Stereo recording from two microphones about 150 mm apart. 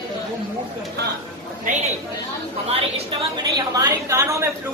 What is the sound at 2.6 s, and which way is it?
Speech, 40° right (ahead or behind).